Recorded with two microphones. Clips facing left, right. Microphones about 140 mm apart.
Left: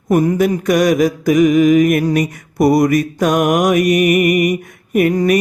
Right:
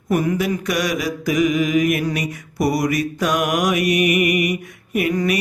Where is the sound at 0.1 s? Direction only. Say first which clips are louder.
Left 6 dB; 40° left (ahead or behind).